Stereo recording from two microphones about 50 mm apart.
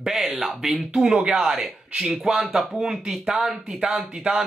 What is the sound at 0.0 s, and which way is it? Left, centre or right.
Speech, centre.